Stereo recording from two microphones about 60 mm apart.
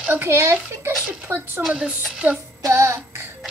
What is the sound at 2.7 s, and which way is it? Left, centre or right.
Music, right.